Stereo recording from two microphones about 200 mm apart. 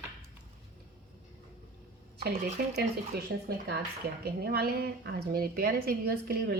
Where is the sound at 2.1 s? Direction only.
55° right (ahead or behind).